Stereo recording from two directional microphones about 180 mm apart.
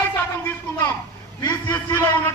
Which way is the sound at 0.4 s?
15° left (ahead or behind).